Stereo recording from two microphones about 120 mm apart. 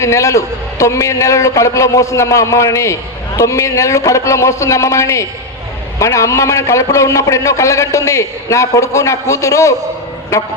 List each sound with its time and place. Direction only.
0.0 s a man's voice: 25° left (ahead or behind)